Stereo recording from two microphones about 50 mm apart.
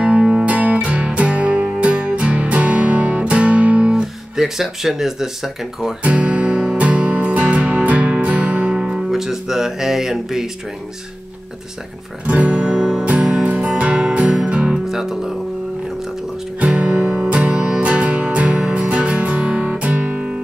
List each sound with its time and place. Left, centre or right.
0.0 s music: right
3.9 s speech: centre
6.0 s music: right
8.7 s music: centre
9.1 s speech: centre
12.3 s music: right
14.9 s speech: centre
16.5 s music: right